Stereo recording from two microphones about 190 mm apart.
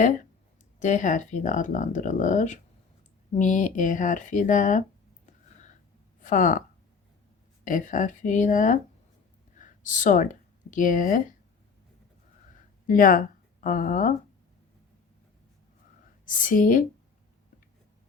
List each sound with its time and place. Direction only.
0.8 s speech: 40° left (ahead or behind)
5.2 s a sound: 40° left (ahead or behind)
6.1 s speech: 45° left (ahead or behind)
7.6 s speech: 45° left (ahead or behind)
12.5 s a sound: 45° left (ahead or behind)
16.2 s speech: 45° left (ahead or behind)